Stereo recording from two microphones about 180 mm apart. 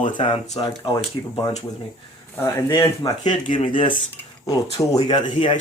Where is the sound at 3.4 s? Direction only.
45° left (ahead or behind).